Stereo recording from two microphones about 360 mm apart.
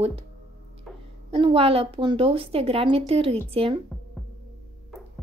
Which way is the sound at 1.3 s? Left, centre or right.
Centre.